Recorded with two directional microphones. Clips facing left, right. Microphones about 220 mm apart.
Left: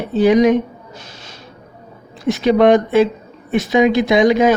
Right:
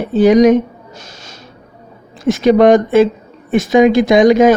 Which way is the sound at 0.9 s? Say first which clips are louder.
Right 1 dB; 45° right (ahead or behind).